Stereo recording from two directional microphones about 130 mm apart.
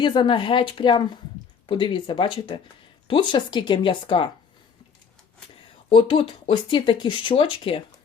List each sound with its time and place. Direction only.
0.0 s a woman's voice: 35° left (ahead or behind)
5.9 s speech: 45° left (ahead or behind)